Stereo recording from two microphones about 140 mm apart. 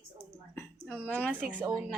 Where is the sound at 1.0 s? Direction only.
10° left (ahead or behind).